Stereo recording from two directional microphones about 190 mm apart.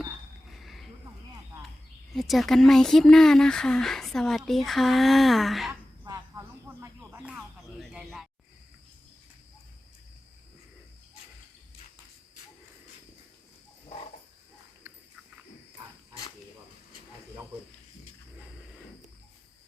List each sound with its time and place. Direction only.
0.5 s a sound: centre (ahead or behind)
2.1 s speech: centre (ahead or behind)
6.1 s cricket: 20° right (ahead or behind)
7.1 s music: 5° right (ahead or behind)